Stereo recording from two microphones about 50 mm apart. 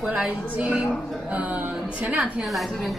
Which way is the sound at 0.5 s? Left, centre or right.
Right.